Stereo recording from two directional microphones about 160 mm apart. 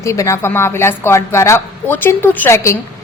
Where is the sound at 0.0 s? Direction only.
20° left (ahead or behind).